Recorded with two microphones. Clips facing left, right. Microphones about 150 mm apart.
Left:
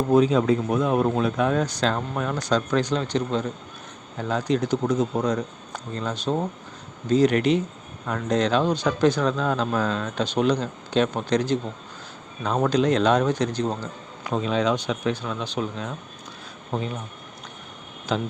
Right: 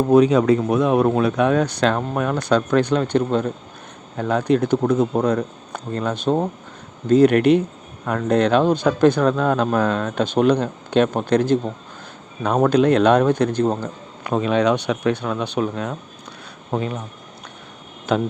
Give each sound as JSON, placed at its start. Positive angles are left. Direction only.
{"t": 0.1, "sound": "speech", "side_deg": -70}
{"t": 18.1, "sound": "speech", "side_deg": -60}